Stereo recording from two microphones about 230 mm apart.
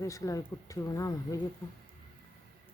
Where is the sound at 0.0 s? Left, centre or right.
Centre.